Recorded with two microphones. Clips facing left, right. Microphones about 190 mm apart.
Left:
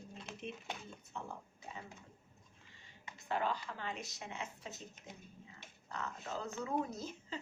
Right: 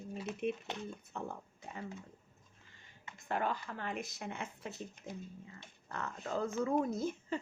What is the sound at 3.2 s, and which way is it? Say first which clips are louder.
Speech: right 1 dB; 50° right (ahead or behind).